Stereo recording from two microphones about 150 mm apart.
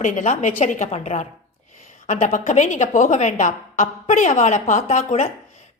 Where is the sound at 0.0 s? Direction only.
55° left (ahead or behind).